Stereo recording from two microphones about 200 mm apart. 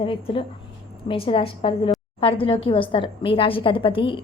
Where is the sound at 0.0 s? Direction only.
25° left (ahead or behind).